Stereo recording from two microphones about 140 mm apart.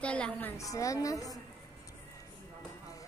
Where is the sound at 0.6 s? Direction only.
25° left (ahead or behind).